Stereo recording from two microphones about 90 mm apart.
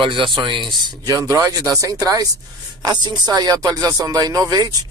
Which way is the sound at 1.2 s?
40° right (ahead or behind).